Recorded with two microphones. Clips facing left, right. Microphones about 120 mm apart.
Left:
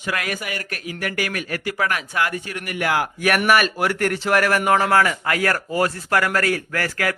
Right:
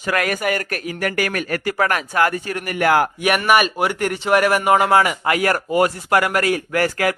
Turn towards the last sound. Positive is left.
turn(degrees=-25)  # may be behind; listen again after turning